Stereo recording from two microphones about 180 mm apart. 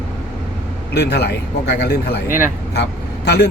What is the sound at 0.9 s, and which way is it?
Speech, 65° left (ahead or behind).